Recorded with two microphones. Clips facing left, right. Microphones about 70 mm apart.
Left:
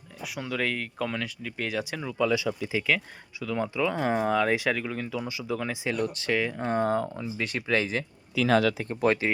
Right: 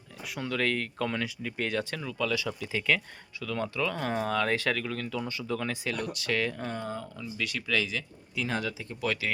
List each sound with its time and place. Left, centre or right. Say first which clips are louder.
0.2 s speech: even; centre
2.5 s speech: left 2 dB; centre
6.0 s speech: left 5 dB; left
6.3 s speech: left 1 dB; centre
6.7 s speech: left 10 dB; left
7.2 s speech: left 3 dB; left
8.4 s speech: left 10 dB; left
8.8 s speech: left 7 dB; left